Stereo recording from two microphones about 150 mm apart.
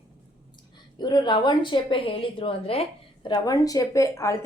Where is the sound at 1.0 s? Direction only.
30° left (ahead or behind).